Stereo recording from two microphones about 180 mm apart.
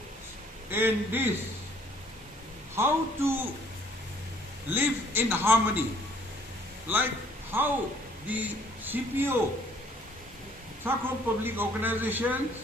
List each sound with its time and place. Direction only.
0.7 s a man's voice: 10° right (ahead or behind)
2.7 s a man's voice: 15° right (ahead or behind)
4.7 s a man's voice: 10° right (ahead or behind)
6.9 s a man's voice: 10° right (ahead or behind)
10.8 s a man's voice: 10° right (ahead or behind)